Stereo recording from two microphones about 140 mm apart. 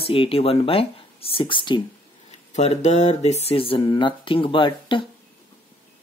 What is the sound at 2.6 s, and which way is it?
Speech, 50° left (ahead or behind).